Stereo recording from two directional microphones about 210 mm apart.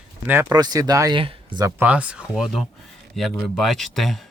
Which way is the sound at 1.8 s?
5° right (ahead or behind).